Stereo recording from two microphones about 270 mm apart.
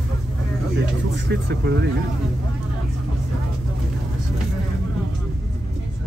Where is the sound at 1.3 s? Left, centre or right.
Right.